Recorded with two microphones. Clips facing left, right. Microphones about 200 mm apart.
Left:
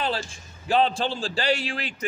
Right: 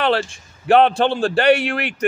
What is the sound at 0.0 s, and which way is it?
Speech, 70° right (ahead or behind).